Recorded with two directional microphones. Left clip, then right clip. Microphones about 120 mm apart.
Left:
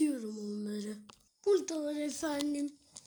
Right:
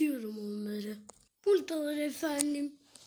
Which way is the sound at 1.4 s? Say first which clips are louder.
Right 2 dB; 20° left (ahead or behind).